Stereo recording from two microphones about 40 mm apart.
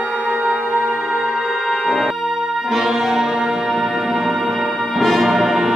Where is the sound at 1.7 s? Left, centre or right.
Centre.